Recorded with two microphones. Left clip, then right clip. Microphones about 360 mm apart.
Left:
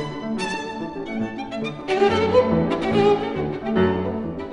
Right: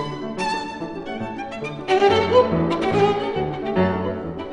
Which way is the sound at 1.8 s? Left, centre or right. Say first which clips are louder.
Right 2 dB; centre.